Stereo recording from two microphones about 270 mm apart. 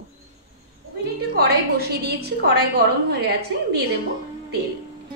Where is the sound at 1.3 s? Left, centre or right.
Right.